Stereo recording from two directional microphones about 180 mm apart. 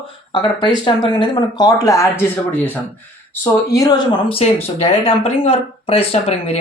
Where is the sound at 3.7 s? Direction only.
20° left (ahead or behind); by 6.6 s 35° left (ahead or behind).